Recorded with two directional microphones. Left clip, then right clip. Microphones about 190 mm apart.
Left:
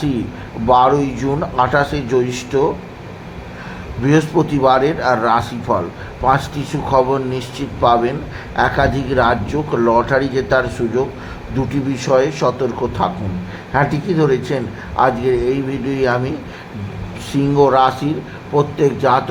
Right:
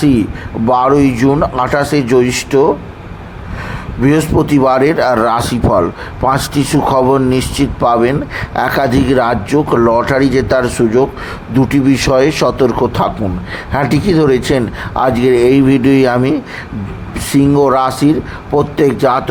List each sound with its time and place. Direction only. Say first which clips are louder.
0.7 s speech: right 2 dB; 20° right (ahead or behind)
4.0 s speech: right 3 dB; 25° right (ahead or behind)
17.3 s speech: right 3 dB; 25° right (ahead or behind)